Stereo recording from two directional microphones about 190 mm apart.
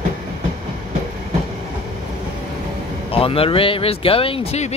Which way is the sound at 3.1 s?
30° left (ahead or behind).